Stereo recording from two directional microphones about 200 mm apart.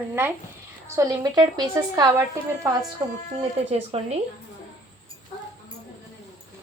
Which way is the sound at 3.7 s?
30° right (ahead or behind).